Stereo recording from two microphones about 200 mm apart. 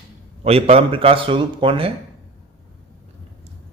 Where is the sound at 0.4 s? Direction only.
30° right (ahead or behind).